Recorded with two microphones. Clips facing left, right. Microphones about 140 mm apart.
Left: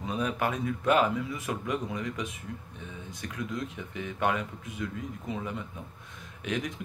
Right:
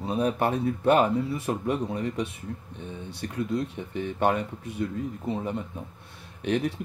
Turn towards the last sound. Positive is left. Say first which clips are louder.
# right 6 dB
turn(degrees=-35)  # may be behind; listen again after turning